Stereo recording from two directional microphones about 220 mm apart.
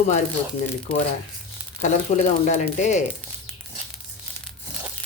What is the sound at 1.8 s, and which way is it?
Speech, 35° left (ahead or behind).